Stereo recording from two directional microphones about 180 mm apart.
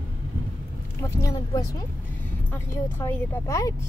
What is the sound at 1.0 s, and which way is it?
Speech, 15° left (ahead or behind).